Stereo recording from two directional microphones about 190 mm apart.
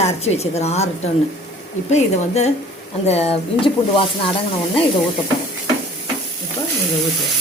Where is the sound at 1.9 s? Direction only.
35° left (ahead or behind).